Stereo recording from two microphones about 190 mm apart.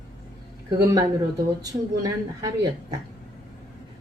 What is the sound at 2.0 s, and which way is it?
Speech, 20° right (ahead or behind).